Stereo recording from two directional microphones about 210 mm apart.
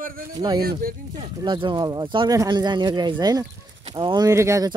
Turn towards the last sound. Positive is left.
turn(degrees=-15)  # may be behind; listen again after turning